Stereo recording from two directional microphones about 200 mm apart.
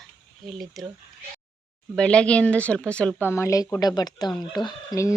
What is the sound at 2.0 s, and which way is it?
A woman's voice, 5° left (ahead or behind).